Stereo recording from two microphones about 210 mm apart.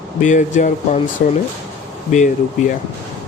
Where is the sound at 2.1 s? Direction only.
35° left (ahead or behind).